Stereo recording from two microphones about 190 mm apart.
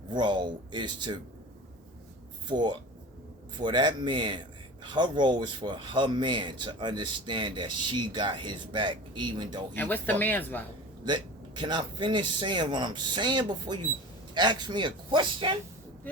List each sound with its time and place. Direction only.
0.1 s speech: 25° right (ahead or behind)
2.5 s speech: 25° right (ahead or behind)
9.7 s speech: 10° left (ahead or behind)
11.0 s speech: 25° right (ahead or behind)